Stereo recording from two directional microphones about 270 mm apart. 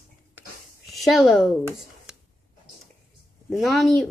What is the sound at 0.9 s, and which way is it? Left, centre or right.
Speech, centre.